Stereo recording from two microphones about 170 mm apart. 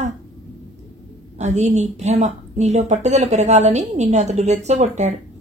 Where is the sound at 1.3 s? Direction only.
40° right (ahead or behind).